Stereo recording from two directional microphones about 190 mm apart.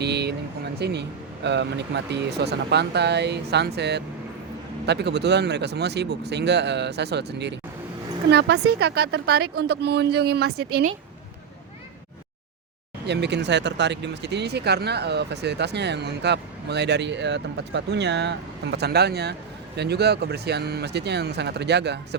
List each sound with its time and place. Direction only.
0.0 s speech: 60° right (ahead or behind)
13.1 s speech: 65° right (ahead or behind)